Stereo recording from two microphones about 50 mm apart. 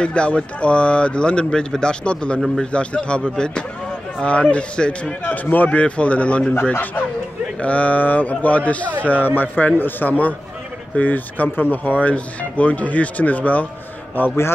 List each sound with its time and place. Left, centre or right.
0.0 s speech: left
5.2 s speech: left
7.6 s speech: left
14.2 s speech: left